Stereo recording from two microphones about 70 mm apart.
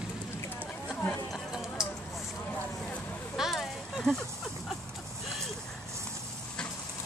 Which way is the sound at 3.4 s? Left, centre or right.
Centre.